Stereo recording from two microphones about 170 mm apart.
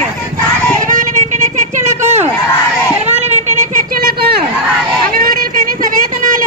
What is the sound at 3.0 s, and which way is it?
Children playing, 45° right (ahead or behind).